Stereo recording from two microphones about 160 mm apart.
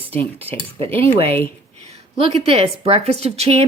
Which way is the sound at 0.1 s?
40° right (ahead or behind).